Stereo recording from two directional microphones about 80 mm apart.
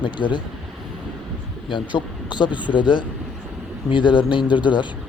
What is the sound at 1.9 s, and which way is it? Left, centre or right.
Speech, left.